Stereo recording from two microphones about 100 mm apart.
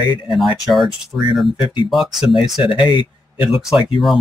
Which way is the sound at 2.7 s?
55° left (ahead or behind).